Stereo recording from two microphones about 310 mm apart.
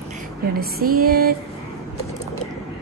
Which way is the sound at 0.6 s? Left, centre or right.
Right.